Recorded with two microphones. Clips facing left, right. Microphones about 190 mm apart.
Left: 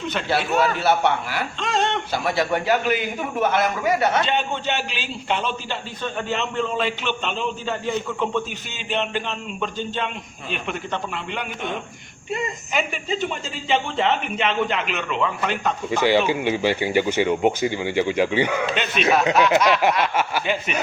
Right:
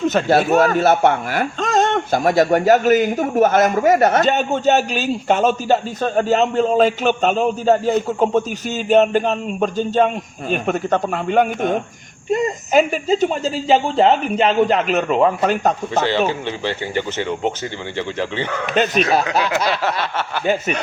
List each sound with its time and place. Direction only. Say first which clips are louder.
0.0 s speech: right 8 dB; 45° right (ahead or behind)
16.3 s speech: left 3 dB; 10° left (ahead or behind)
18.7 s speech: right 7 dB; 40° right (ahead or behind)
20.4 s speech: right 6 dB; 45° right (ahead or behind)